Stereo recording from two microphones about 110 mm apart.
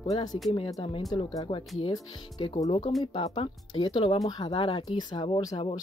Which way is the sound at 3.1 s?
50° left (ahead or behind).